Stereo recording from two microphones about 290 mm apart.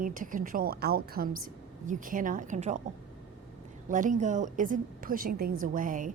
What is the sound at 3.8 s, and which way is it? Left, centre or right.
A woman's voice, right.